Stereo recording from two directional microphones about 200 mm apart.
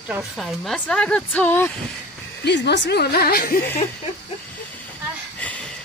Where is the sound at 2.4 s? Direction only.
60° left (ahead or behind).